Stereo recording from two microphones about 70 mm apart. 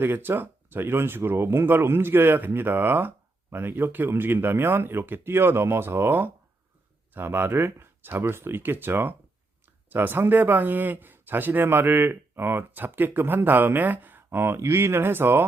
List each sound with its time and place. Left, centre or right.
0.0 s speech: right